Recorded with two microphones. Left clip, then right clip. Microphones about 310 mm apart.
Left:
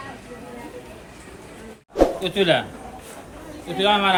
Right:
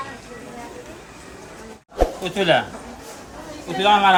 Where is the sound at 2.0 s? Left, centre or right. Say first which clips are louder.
Left 2 dB; centre.